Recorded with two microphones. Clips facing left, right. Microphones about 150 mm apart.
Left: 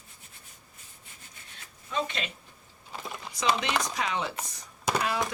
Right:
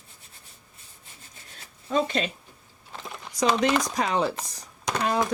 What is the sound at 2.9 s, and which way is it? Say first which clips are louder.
Typing: even; 5° left (ahead or behind).